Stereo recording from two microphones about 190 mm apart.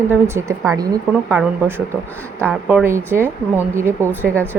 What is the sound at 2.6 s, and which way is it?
Speech, 10° right (ahead or behind).